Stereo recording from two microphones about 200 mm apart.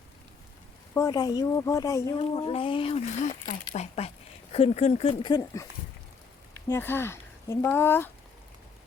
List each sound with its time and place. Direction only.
0.9 s speech: 20° left (ahead or behind)
2.1 s speech: 30° left (ahead or behind); by 8.1 s 10° left (ahead or behind)